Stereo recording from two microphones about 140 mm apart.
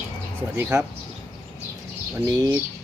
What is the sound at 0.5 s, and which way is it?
Speech, 20° right (ahead or behind).